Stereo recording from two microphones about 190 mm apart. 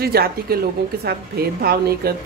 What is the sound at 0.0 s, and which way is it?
A woman's voice, 55° right (ahead or behind).